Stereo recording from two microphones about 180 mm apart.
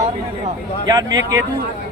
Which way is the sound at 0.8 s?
20° right (ahead or behind).